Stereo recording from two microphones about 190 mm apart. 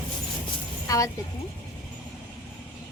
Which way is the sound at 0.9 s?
15° left (ahead or behind).